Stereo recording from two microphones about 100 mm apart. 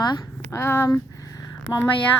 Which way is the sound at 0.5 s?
25° left (ahead or behind).